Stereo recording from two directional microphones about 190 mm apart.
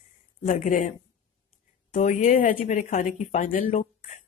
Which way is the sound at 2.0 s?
40° left (ahead or behind).